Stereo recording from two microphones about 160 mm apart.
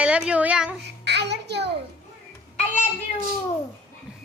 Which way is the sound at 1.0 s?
90° right.